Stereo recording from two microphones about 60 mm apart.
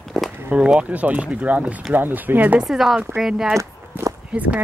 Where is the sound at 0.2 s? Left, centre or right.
Centre.